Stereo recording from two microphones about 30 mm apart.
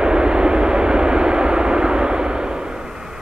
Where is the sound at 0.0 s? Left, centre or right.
Right.